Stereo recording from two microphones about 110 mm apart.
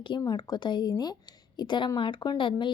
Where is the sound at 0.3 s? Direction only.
40° left (ahead or behind).